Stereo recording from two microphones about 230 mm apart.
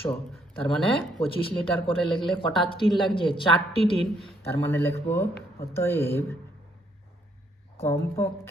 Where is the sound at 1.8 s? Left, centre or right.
Left.